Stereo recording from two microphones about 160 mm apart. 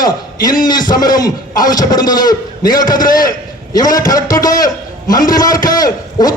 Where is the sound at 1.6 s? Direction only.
25° left (ahead or behind).